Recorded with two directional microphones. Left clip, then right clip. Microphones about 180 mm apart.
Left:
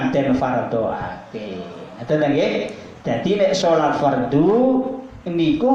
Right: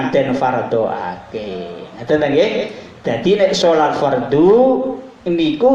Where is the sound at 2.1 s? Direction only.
40° right (ahead or behind).